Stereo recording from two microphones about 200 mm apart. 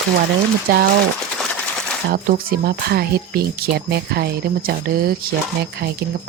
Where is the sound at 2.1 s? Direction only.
45° right (ahead or behind).